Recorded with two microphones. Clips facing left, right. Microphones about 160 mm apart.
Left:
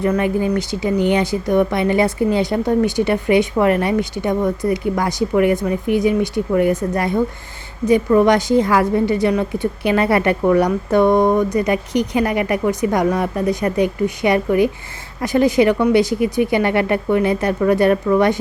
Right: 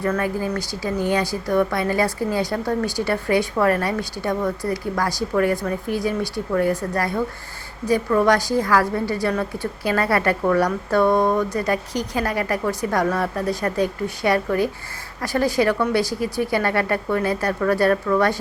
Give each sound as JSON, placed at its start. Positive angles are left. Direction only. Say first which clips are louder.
{"t": 0.0, "sound": "speech", "louder": "left 5 dB", "side_deg": 20}